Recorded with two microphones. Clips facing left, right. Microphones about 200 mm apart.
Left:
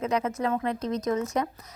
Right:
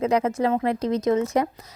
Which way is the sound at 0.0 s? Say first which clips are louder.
Right 6 dB; 30° right (ahead or behind).